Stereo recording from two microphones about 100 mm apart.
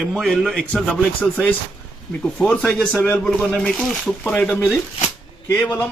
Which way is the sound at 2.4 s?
5° left (ahead or behind).